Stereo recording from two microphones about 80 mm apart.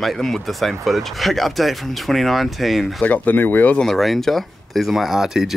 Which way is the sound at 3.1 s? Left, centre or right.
Left.